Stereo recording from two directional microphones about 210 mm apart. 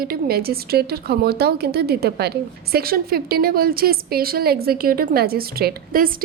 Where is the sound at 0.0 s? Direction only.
45° right (ahead or behind).